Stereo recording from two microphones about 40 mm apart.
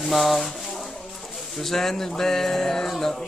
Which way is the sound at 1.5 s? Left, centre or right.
Centre.